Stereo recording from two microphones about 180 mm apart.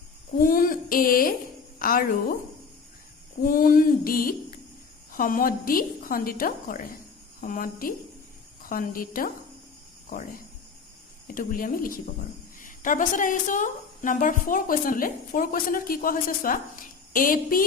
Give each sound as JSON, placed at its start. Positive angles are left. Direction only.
{"t": 0.3, "sound": "a woman's voice", "side_deg": 50}
{"t": 3.4, "sound": "a woman's voice", "side_deg": 50}